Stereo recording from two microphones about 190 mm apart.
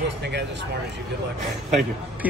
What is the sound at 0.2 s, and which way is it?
Speech, 65° right (ahead or behind).